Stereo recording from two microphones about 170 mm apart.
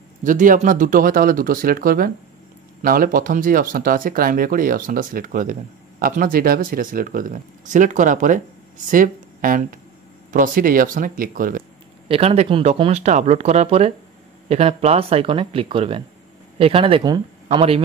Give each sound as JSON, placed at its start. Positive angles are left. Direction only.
{"t": 0.2, "sound": "speech", "side_deg": -50}
{"t": 12.1, "sound": "speech", "side_deg": -35}